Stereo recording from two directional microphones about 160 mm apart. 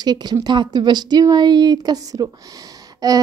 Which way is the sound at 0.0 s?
25° right (ahead or behind).